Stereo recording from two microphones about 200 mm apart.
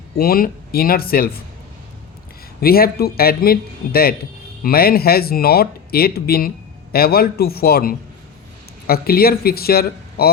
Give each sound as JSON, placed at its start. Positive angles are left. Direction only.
{"t": 0.2, "sound": "speech", "side_deg": 45}
{"t": 2.6, "sound": "speech", "side_deg": 50}